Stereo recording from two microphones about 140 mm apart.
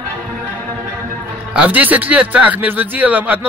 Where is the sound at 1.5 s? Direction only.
10° right (ahead or behind).